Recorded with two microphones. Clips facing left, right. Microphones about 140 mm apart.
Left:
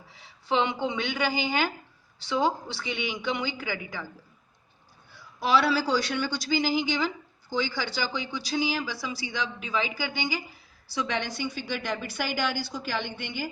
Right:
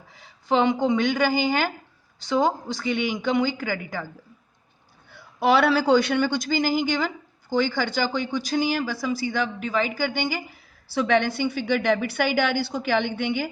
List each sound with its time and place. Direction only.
0.1 s a woman's voice: 45° right (ahead or behind)
5.1 s a woman's voice: 60° right (ahead or behind)